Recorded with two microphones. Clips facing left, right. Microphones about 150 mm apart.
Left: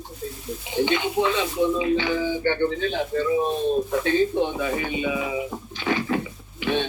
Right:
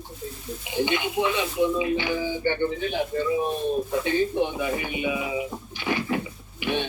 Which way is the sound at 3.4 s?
20° left (ahead or behind).